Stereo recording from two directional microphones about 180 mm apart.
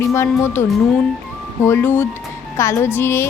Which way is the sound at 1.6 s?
10° left (ahead or behind).